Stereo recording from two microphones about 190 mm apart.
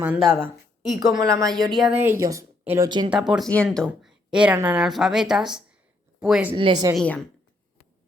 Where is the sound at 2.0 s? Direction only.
15° right (ahead or behind).